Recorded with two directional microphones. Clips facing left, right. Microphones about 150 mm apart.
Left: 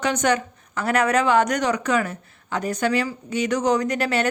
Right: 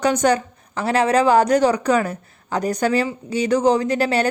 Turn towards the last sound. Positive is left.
turn(degrees=-35)  # may be behind; listen again after turning